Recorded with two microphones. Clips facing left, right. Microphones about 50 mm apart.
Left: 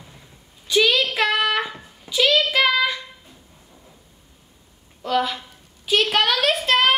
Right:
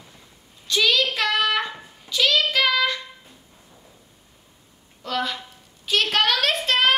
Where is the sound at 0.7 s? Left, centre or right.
Centre.